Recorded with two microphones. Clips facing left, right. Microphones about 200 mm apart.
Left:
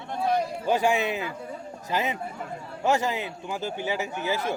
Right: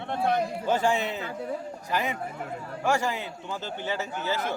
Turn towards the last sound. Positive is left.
turn(degrees=15)  # may be behind; listen again after turning